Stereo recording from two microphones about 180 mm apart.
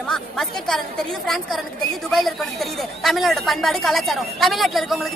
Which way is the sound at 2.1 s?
Centre (ahead or behind).